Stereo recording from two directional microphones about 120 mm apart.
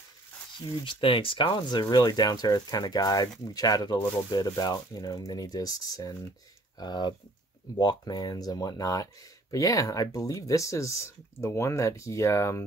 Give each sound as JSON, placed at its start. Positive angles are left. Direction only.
{"t": 0.6, "sound": "speech", "side_deg": 45}